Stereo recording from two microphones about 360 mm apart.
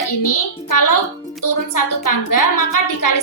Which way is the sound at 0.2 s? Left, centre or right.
Left.